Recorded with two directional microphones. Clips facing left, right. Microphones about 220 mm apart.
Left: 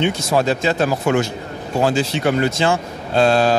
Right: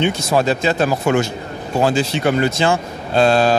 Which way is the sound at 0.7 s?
20° right (ahead or behind).